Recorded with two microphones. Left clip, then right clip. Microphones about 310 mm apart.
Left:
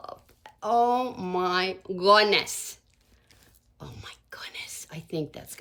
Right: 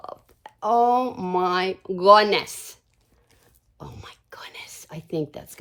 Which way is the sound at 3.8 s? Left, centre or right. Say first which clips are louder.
Right 2 dB; right.